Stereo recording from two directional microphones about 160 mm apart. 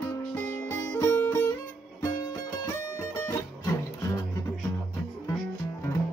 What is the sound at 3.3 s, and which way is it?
Music, 20° left (ahead or behind).